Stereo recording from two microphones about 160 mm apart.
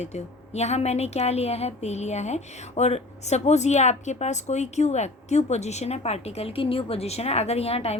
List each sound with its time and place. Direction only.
0.0 s a woman's voice: 45° left (ahead or behind)